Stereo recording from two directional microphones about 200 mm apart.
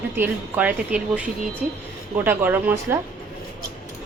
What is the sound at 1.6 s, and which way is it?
Speech, 40° right (ahead or behind).